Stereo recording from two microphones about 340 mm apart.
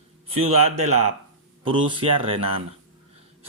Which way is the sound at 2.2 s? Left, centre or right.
Centre.